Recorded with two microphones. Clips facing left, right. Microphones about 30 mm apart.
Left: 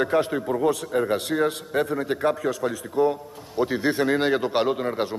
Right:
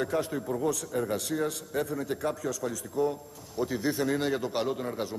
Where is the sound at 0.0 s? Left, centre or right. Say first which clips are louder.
Left 7 dB; left.